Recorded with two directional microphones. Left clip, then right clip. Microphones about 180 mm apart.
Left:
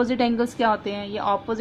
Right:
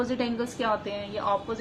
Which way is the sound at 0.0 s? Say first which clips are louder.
Left 7 dB; 45° left (ahead or behind).